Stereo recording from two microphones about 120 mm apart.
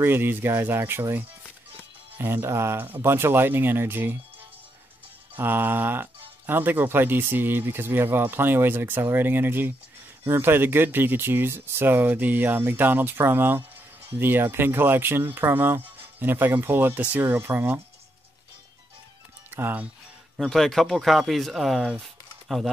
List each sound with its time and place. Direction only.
0.0 s speech: 20° right (ahead or behind)
5.3 s speech: 15° right (ahead or behind)
19.5 s speech: 15° right (ahead or behind)
20.3 s speech: centre (ahead or behind)